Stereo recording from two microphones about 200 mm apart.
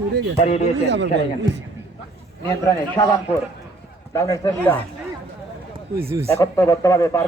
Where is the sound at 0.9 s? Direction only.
60° right (ahead or behind).